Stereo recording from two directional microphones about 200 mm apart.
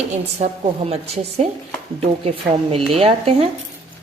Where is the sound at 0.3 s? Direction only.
30° right (ahead or behind).